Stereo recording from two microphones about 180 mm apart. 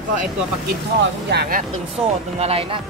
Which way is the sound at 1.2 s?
65° right (ahead or behind).